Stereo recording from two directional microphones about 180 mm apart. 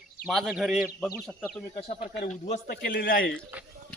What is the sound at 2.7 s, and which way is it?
Speech, 60° left (ahead or behind).